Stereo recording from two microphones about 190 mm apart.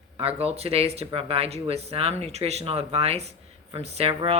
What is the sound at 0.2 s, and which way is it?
Speech, 30° right (ahead or behind).